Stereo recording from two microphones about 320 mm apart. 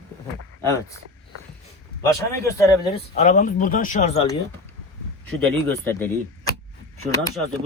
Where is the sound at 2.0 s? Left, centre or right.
Centre.